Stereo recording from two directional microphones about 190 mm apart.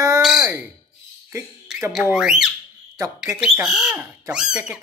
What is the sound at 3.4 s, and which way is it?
Speech, 5° right (ahead or behind).